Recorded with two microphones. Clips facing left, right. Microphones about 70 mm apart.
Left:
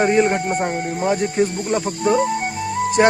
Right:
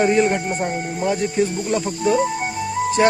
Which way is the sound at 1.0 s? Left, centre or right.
Left.